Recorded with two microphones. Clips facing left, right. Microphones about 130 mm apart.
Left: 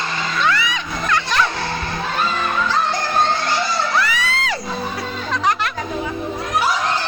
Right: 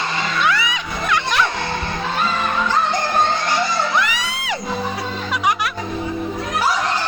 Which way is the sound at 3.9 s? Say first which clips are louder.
Left 1 dB; 15° right (ahead or behind).